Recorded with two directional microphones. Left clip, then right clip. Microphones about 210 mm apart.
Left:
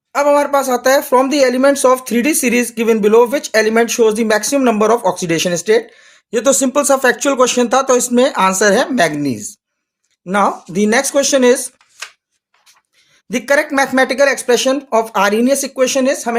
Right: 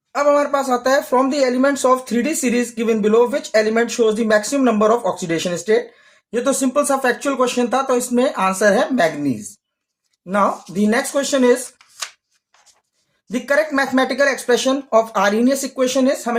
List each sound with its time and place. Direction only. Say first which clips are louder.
0.1 s speech: left 3 dB; 45° left (ahead or behind)
6.3 s speech: left 4 dB; 60° left (ahead or behind)
13.3 s speech: left 4 dB; 45° left (ahead or behind)